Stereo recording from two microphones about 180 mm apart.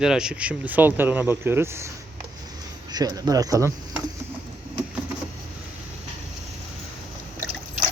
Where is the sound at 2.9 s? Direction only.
20° right (ahead or behind).